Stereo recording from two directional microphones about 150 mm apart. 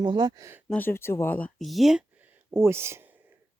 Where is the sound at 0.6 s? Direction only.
10° left (ahead or behind).